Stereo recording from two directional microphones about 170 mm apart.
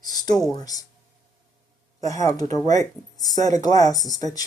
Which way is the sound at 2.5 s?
20° left (ahead or behind).